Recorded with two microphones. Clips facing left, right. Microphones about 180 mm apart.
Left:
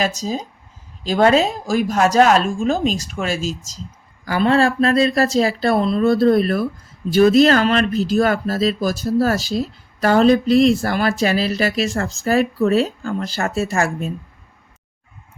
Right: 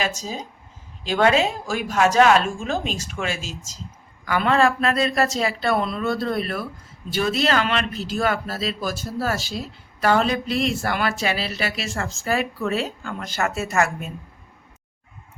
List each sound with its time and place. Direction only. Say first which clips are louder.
0.0 s speech: left 6 dB; 40° left (ahead or behind)